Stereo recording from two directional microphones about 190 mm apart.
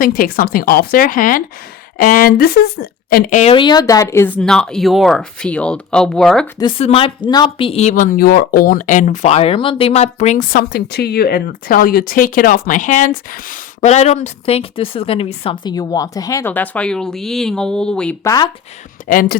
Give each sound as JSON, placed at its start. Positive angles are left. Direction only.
{"t": 0.0, "sound": "speech", "side_deg": 50}
{"t": 3.5, "sound": "speech", "side_deg": 25}
{"t": 6.6, "sound": "speech", "side_deg": 25}
{"t": 13.8, "sound": "speech", "side_deg": 35}
{"t": 18.2, "sound": "speech", "side_deg": 20}
{"t": 19.0, "sound": "speech", "side_deg": 45}